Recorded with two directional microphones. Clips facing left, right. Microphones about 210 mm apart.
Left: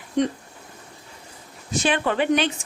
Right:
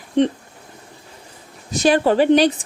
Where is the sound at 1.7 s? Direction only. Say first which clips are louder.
Right 7 dB; 40° right (ahead or behind).